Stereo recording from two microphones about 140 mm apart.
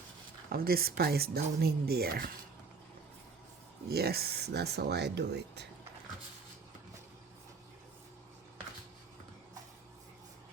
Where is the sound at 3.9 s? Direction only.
90° right.